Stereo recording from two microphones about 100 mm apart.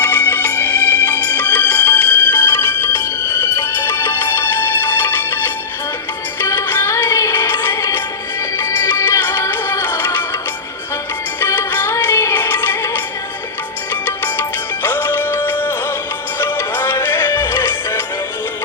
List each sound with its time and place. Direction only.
0.0 s music: 20° left (ahead or behind)
11.3 s music: 20° left (ahead or behind)